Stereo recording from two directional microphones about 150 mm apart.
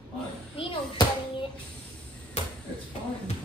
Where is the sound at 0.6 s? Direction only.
35° left (ahead or behind).